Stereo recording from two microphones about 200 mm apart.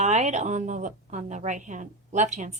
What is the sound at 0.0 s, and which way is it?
A woman's voice, 35° right (ahead or behind).